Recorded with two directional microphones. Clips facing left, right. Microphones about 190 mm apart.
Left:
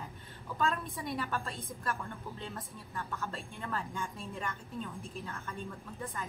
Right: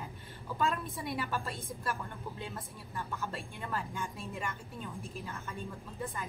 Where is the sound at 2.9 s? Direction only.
10° right (ahead or behind).